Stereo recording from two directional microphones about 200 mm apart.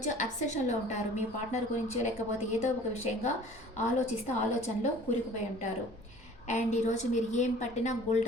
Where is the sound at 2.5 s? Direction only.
35° left (ahead or behind).